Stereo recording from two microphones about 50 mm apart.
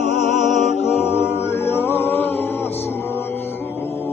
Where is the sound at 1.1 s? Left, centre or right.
Left.